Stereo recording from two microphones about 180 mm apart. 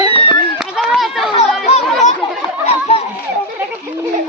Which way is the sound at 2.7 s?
35° left (ahead or behind).